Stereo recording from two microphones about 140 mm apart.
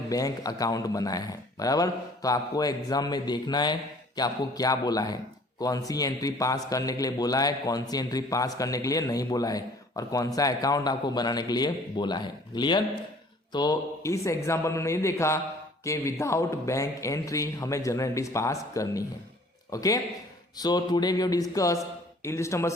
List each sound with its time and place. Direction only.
0.1 s a man's voice: 25° left (ahead or behind)